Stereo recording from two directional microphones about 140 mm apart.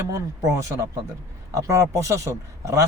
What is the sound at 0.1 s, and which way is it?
Speech, 25° right (ahead or behind).